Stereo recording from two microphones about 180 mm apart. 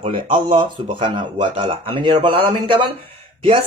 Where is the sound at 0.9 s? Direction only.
25° right (ahead or behind).